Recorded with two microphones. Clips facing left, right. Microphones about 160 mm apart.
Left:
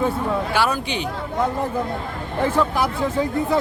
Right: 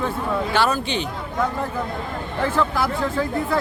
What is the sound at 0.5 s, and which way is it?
Speech, 10° left (ahead or behind).